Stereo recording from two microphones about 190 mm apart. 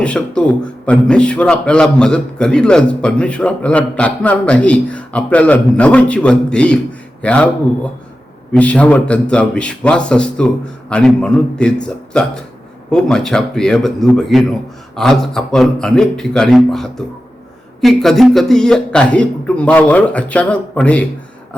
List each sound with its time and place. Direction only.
0.0 s a man's voice: 5° left (ahead or behind)
8.5 s a man's voice: 5° left (ahead or behind)